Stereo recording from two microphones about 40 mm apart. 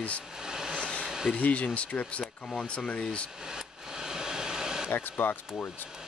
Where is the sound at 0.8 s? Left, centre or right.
Left.